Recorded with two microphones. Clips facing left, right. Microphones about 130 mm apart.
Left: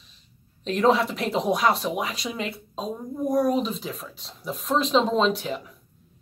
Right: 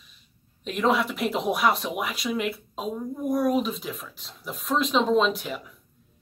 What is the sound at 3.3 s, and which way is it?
Speech, centre (ahead or behind).